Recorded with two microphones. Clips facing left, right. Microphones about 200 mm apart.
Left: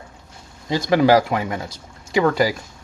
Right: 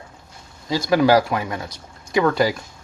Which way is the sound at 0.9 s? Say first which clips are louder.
Left 1 dB; 20° left (ahead or behind).